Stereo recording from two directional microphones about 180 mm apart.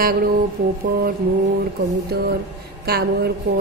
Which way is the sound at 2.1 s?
65° right (ahead or behind).